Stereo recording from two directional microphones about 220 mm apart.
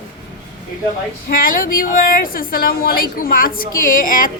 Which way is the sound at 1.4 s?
40° left (ahead or behind).